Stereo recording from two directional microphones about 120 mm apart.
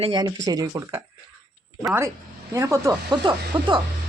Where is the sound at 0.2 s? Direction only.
30° right (ahead or behind).